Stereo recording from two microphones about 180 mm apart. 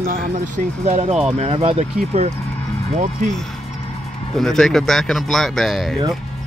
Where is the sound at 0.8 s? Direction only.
40° right (ahead or behind).